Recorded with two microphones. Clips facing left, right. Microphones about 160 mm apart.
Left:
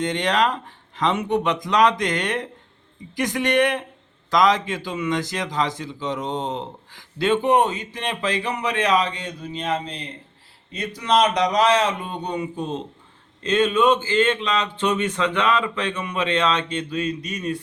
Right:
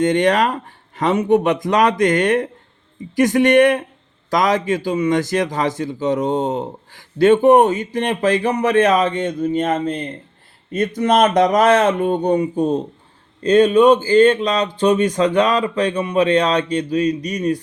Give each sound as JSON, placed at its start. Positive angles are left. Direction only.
{"t": 0.0, "sound": "a man's voice", "side_deg": -50}